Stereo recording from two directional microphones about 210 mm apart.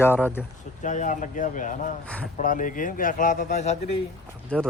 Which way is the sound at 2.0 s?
5° left (ahead or behind).